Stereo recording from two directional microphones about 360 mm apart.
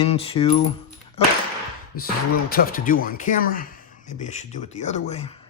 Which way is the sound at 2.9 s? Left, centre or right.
Left.